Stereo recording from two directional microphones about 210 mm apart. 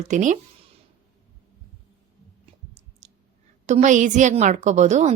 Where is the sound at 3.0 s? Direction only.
35° right (ahead or behind).